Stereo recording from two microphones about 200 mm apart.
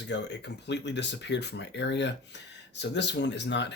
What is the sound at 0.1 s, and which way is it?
Speech, 60° left (ahead or behind).